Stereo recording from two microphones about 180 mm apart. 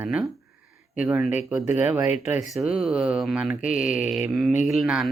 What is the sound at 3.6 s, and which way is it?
Speech, 45° left (ahead or behind).